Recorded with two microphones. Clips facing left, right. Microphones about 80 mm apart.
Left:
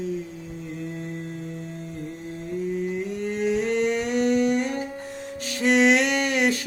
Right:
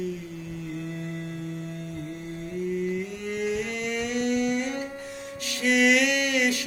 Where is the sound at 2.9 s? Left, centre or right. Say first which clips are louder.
Left 3 dB; left.